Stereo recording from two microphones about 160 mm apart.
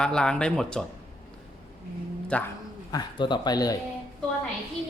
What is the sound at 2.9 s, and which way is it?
Speech, 25° left (ahead or behind).